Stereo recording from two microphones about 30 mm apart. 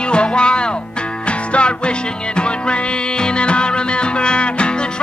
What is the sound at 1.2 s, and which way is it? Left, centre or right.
Music, left.